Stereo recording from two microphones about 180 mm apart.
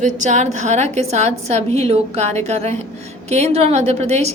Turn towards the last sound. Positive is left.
turn(degrees=-35)  # may be behind; listen again after turning